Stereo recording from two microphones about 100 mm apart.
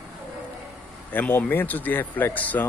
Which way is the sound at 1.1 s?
15° left (ahead or behind).